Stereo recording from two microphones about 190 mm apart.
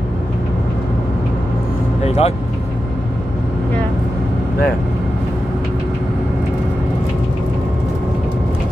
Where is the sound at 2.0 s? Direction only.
35° left (ahead or behind).